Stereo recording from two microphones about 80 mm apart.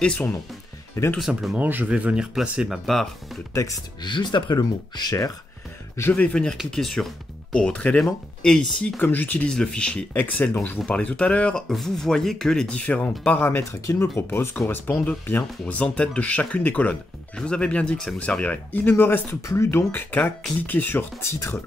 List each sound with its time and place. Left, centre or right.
1.0 s speech: left
1.6 s speech: right
2.7 s speech: centre
4.0 s speech: left
6.1 s speech: centre
6.7 s speech: centre
7.5 s speech: centre
9.0 s speech: left
9.5 s speech: centre
11.7 s speech: centre
18.4 s speech: left
19.4 s speech: left